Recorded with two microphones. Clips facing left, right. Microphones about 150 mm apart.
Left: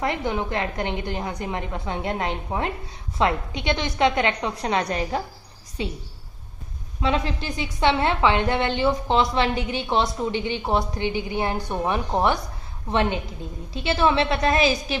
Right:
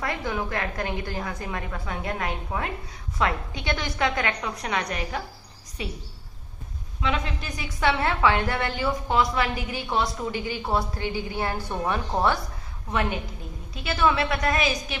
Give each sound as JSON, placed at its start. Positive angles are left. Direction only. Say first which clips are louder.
{"t": 0.0, "sound": "a woman's voice", "louder": "left 4 dB", "side_deg": 20}
{"t": 7.0, "sound": "a woman's voice", "louder": "left 4 dB", "side_deg": 30}